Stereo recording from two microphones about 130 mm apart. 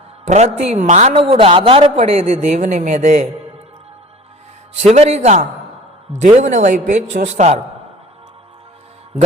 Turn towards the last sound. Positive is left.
turn(degrees=-65)  # may be behind; listen again after turning